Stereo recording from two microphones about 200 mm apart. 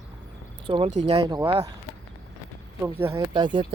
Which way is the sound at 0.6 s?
25° right (ahead or behind).